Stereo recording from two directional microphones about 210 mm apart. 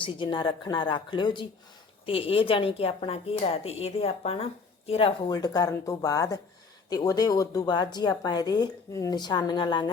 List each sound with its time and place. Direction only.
0.0 s speech: 20° left (ahead or behind)